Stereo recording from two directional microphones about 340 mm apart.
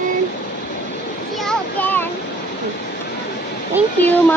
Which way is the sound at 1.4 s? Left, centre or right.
Centre.